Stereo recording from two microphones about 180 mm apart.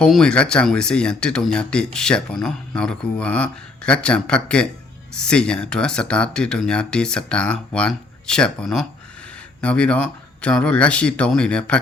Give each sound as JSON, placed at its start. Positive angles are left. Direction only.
{"t": 0.0, "sound": "speech", "side_deg": 5}